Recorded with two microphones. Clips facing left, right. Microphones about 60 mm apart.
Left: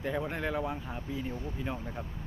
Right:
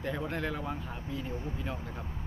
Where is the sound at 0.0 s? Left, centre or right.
Centre.